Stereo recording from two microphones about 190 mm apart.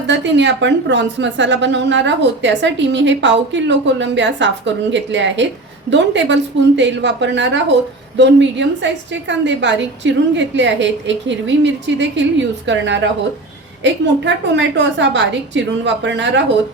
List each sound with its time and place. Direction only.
0.1 s a woman's voice: 70° right (ahead or behind)